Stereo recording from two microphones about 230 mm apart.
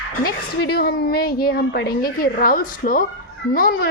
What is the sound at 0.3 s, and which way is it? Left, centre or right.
A woman's voice, left.